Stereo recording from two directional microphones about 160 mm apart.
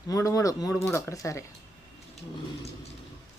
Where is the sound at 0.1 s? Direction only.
20° left (ahead or behind).